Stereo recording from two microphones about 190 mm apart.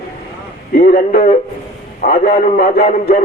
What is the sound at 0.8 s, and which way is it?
Speech, 50° left (ahead or behind).